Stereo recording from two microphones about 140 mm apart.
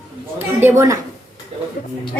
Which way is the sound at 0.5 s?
20° right (ahead or behind).